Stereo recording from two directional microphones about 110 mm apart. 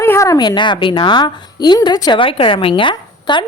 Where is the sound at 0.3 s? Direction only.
45° left (ahead or behind).